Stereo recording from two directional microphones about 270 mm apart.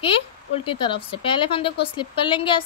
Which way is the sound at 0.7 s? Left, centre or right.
Centre.